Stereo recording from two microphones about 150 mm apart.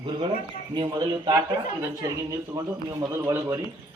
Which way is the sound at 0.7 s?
30° right (ahead or behind).